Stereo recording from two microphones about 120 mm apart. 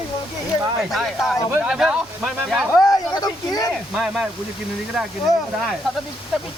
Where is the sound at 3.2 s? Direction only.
35° left (ahead or behind).